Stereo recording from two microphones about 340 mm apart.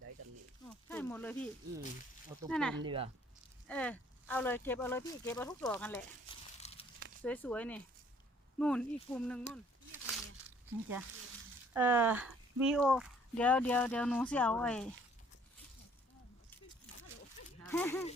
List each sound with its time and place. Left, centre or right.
0.7 s a sound: centre
2.5 s speech: centre
2.8 s speech: centre
3.7 s speech: centre
6.6 s a sound: centre
7.2 s speech: centre
11.7 s speech: centre
17.7 s speech: centre